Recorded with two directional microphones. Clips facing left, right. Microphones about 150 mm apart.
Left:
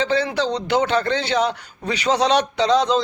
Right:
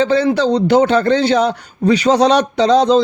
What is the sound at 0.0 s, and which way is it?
Speech, 45° right (ahead or behind).